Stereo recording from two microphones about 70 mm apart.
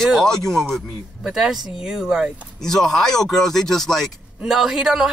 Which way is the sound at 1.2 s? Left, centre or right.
Centre.